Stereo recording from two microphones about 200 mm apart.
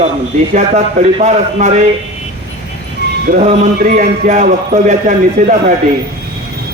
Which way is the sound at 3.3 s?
40° right (ahead or behind).